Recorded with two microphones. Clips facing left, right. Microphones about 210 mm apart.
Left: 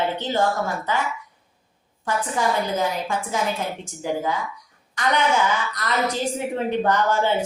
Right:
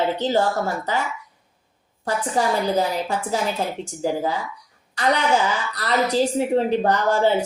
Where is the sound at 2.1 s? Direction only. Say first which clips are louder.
Right 2 dB; 35° right (ahead or behind).